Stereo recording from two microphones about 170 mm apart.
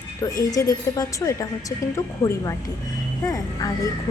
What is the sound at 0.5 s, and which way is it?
Speech, 20° left (ahead or behind).